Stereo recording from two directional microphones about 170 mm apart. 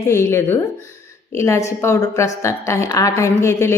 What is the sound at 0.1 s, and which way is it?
A woman's voice, 15° left (ahead or behind).